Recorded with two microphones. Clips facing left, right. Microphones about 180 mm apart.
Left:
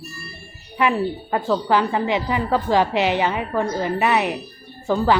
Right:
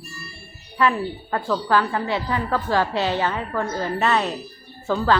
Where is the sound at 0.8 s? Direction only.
15° left (ahead or behind).